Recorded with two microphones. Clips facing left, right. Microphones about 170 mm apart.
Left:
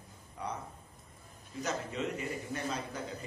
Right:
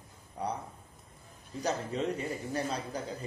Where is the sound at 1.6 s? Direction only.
35° right (ahead or behind).